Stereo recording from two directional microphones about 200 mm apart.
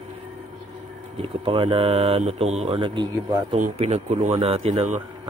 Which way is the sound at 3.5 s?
35° right (ahead or behind).